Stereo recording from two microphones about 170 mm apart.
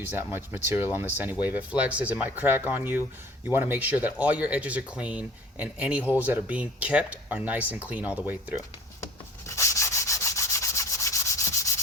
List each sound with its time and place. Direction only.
0.0 s speech: 10° right (ahead or behind)
9.5 s rub: 15° left (ahead or behind)